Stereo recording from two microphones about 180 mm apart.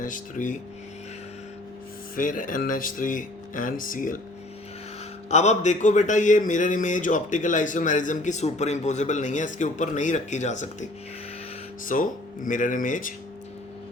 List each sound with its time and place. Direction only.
0.0 s speech: 45° left (ahead or behind)
2.1 s speech: 50° left (ahead or behind)
5.3 s speech: 40° left (ahead or behind)
11.9 s speech: 45° left (ahead or behind)